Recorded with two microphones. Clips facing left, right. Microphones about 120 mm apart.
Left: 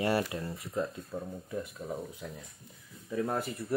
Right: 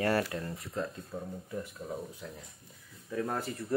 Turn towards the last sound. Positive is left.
turn(degrees=15)  # may be behind; listen again after turning